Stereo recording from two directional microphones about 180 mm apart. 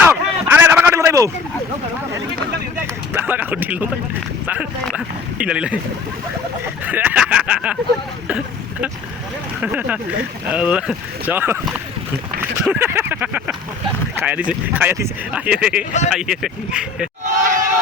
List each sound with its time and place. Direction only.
0.0 s a sound: 10° right (ahead or behind)
3.1 s speech: 10° right (ahead or behind)
4.9 s speech: 5° right (ahead or behind)
6.8 s speech: 10° right (ahead or behind)
9.6 s speech: 5° right (ahead or behind)
12.6 s speech: 10° right (ahead or behind)
17.2 s speech: 45° right (ahead or behind)